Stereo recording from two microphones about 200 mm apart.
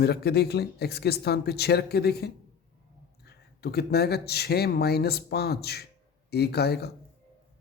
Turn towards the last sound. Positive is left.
turn(degrees=55)  # may be behind; listen again after turning